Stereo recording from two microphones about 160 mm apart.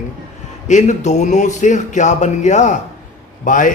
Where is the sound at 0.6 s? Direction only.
50° left (ahead or behind).